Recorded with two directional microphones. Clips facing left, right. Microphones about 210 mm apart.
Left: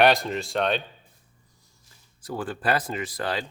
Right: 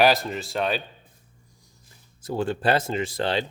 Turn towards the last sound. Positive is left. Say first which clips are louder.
# right 4 dB
turn(degrees=-25)  # may be behind; listen again after turning